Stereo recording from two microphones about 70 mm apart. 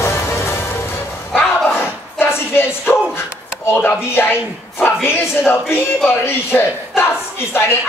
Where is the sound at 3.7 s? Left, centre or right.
Left.